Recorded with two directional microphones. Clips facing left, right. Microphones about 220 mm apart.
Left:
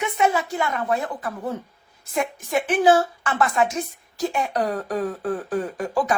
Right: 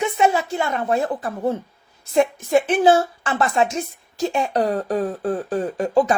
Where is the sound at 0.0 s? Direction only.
30° right (ahead or behind).